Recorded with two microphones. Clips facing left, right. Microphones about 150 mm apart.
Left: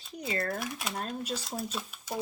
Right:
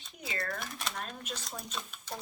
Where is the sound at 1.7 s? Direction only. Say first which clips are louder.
Left 4 dB; 5° left (ahead or behind).